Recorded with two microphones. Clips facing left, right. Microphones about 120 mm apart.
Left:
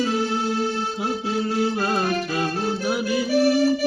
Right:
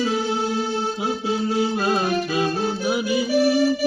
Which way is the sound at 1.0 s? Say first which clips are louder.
Even; 5° right (ahead or behind).